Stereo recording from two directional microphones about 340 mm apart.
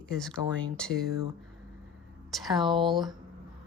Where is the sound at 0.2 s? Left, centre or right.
Centre.